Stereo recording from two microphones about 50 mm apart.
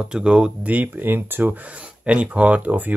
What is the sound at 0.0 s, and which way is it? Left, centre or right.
Speech, centre.